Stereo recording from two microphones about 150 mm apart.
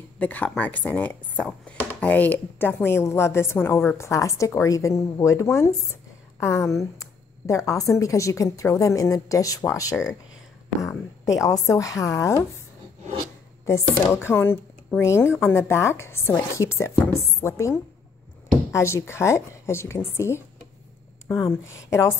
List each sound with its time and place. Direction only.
0.2 s a woman's voice: 10° left (ahead or behind)
13.7 s speech: 15° left (ahead or behind)
21.5 s a woman's voice: 20° left (ahead or behind)